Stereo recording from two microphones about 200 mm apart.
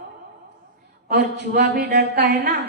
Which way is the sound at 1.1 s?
55° right (ahead or behind).